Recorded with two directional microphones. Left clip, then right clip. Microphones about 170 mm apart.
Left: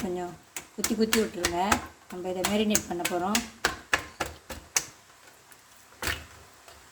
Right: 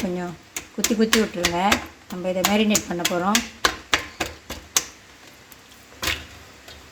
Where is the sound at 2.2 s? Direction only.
30° right (ahead or behind).